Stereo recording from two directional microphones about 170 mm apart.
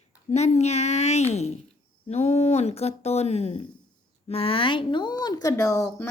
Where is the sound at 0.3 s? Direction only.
40° left (ahead or behind).